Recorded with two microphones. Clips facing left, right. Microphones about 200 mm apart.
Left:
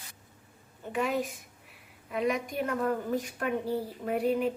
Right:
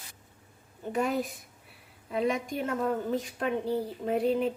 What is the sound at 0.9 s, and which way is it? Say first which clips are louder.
A woman's voice: right 1 dB; 40° right (ahead or behind).